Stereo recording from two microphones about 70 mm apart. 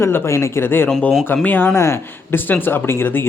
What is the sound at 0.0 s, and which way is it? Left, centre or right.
Speech, left.